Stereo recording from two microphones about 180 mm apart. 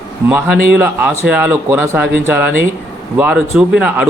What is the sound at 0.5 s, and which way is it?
Speech, 60° right (ahead or behind).